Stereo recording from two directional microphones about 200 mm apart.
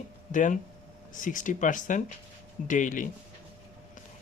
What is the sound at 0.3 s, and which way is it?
Speech, 40° left (ahead or behind).